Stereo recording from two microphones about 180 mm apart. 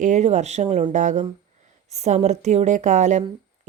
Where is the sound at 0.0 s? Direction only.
40° right (ahead or behind).